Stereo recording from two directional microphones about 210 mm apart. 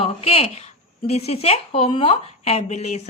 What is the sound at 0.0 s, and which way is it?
A woman's voice, 25° left (ahead or behind).